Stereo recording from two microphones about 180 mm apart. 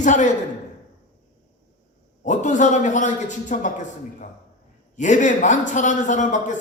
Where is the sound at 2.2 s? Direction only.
45° left (ahead or behind).